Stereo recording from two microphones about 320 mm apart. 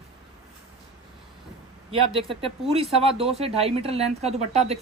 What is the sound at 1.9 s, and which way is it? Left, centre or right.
A woman's voice, centre.